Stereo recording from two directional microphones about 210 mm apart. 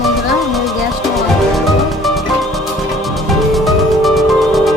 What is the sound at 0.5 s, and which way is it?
Music, centre (ahead or behind).